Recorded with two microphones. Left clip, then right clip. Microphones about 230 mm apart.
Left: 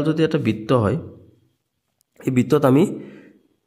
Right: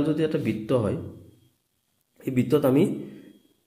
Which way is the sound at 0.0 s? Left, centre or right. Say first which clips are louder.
Left 5 dB; left.